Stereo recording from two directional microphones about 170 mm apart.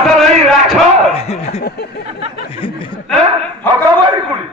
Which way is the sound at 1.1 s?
40° left (ahead or behind).